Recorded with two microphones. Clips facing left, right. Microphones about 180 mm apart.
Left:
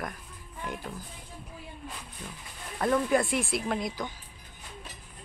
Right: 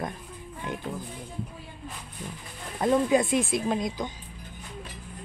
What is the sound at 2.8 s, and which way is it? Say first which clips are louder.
Speech: right 3 dB; 20° right (ahead or behind).